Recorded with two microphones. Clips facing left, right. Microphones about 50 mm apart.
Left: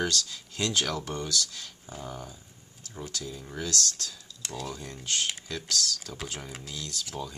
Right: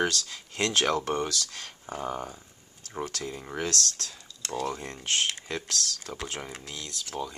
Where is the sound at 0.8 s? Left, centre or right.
Right.